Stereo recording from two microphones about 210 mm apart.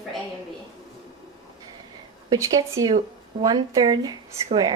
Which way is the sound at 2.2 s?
15° right (ahead or behind).